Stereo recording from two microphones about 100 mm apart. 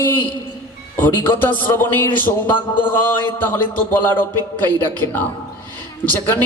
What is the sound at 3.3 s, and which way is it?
Speech, 20° left (ahead or behind).